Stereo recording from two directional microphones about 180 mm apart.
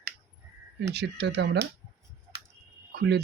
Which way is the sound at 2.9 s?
70° right (ahead or behind).